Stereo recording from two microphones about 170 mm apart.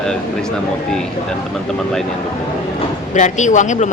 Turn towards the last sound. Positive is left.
turn(degrees=45)  # may be behind; listen again after turning